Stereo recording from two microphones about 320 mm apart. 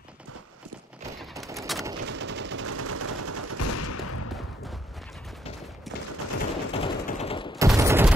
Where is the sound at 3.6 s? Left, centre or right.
Left.